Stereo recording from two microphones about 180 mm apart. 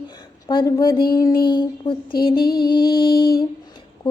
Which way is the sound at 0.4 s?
25° left (ahead or behind).